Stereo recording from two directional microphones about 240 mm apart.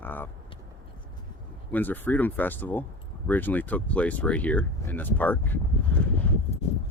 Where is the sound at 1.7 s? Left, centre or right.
Centre.